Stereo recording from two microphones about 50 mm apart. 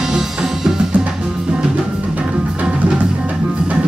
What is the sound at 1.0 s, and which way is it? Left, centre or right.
Music, centre.